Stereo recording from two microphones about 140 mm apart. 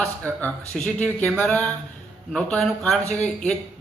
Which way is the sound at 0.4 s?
10° left (ahead or behind).